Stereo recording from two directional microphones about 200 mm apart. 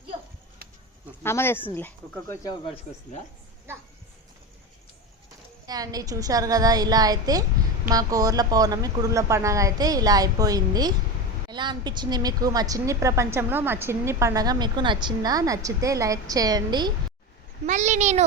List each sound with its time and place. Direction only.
1.2 s speech: 10° left (ahead or behind)
5.6 s a woman's voice: 20° right (ahead or behind)
17.7 s a child's voice: 35° right (ahead or behind)